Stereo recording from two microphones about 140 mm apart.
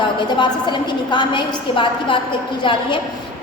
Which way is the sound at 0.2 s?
35° left (ahead or behind).